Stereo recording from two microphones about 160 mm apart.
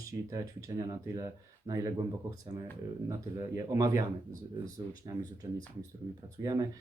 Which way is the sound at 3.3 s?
20° right (ahead or behind).